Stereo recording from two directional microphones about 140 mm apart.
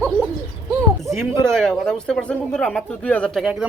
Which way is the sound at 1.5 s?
5° left (ahead or behind).